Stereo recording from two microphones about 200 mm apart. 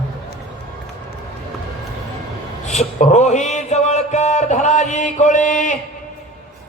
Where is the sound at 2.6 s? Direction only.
35° left (ahead or behind).